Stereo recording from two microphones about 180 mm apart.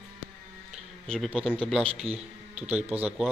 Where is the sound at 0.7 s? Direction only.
Centre (ahead or behind).